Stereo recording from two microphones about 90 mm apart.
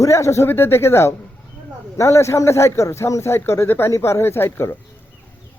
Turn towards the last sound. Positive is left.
turn(degrees=25)  # may be behind; listen again after turning